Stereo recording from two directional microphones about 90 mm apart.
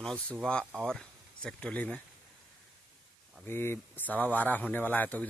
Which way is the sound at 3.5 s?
25° left (ahead or behind).